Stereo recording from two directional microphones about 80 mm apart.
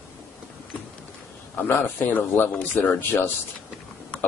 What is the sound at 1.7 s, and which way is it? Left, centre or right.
A man's voice, left.